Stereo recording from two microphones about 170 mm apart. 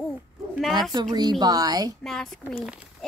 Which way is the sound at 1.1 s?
25° right (ahead or behind).